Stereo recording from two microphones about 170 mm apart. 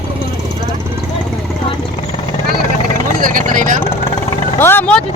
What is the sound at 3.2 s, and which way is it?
Vehicle, 55° right (ahead or behind).